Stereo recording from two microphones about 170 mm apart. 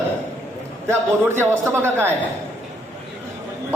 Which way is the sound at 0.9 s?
15° right (ahead or behind).